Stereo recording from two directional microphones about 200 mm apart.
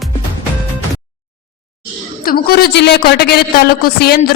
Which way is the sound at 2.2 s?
50° left (ahead or behind).